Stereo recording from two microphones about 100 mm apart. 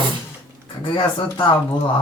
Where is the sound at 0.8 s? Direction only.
50° left (ahead or behind).